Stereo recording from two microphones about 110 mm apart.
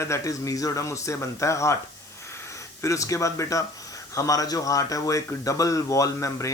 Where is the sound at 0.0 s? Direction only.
30° left (ahead or behind).